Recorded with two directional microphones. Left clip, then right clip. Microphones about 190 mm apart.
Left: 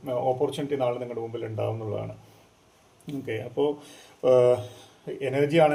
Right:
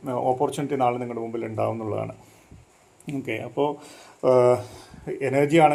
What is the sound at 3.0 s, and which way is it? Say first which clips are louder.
Speech: right 2 dB; 30° right (ahead or behind).